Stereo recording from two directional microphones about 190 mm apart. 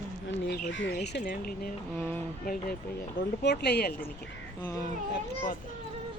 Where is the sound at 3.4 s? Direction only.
60° left (ahead or behind).